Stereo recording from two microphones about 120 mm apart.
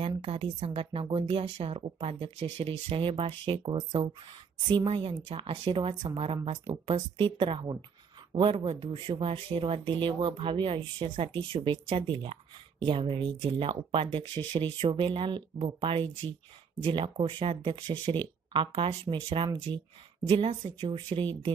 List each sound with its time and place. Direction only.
0.0 s speech: 55° right (ahead or behind)